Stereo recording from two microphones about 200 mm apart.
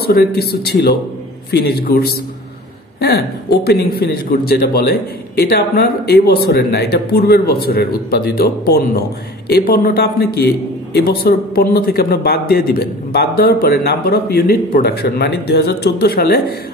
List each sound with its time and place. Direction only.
0.0 s a man's voice: 50° left (ahead or behind)